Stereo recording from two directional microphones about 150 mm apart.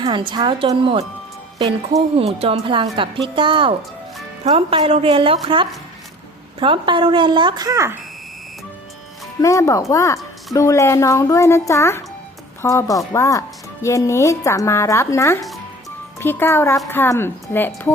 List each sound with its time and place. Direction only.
0.0 s a woman's voice: 30° right (ahead or behind)
9.4 s a woman's voice: 20° left (ahead or behind)